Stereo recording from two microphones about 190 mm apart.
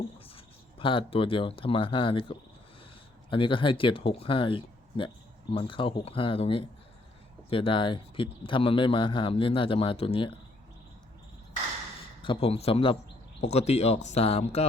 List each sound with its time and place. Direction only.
0.3 s speech: 25° left (ahead or behind)
12.2 s speech: 30° left (ahead or behind)